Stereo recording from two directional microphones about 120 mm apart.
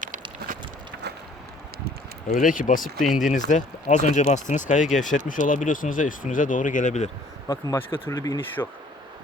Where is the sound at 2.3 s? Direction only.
90° left.